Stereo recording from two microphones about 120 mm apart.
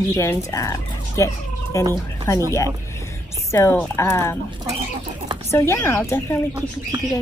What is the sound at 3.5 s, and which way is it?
Speech, 20° left (ahead or behind).